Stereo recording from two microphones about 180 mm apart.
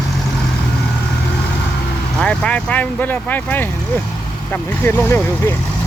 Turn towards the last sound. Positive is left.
turn(degrees=10)  # may be behind; listen again after turning